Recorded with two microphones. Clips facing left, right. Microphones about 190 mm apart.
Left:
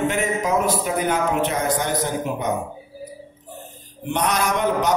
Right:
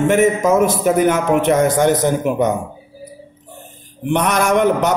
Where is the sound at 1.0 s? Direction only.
70° right (ahead or behind).